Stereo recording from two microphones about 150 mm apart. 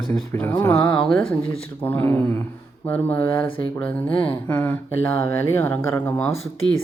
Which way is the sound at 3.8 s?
10° left (ahead or behind).